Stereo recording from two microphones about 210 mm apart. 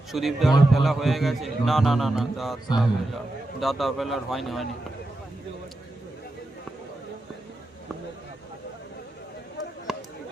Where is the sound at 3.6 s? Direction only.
Centre (ahead or behind).